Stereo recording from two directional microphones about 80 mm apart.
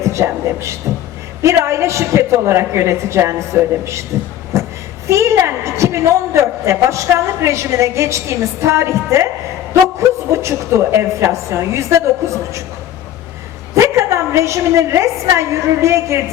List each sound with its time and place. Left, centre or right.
0.0 s a man's voice: right
4.5 s a sound: right
5.0 s a woman's voice: right
10.3 s a woman's voice: right
13.7 s a woman's voice: right